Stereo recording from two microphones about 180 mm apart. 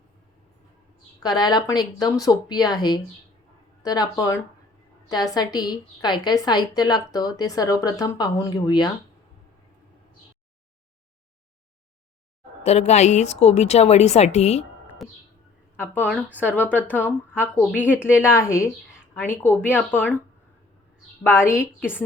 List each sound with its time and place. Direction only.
1.2 s a woman's voice: 20° left (ahead or behind)
12.6 s a woman's voice: 40° left (ahead or behind)
14.8 s music: centre (ahead or behind)
16.4 s a woman's voice: 10° left (ahead or behind)
17.7 s speech: 5° right (ahead or behind)
17.9 s a woman's voice: 15° left (ahead or behind)
21.2 s a woman's voice: 15° left (ahead or behind)